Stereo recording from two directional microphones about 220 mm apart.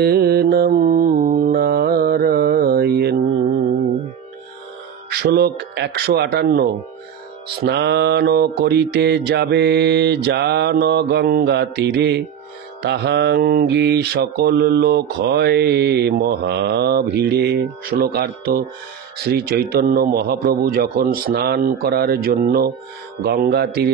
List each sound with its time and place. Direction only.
0.0 s mantra: 45° right (ahead or behind)
5.2 s mantra: 50° right (ahead or behind)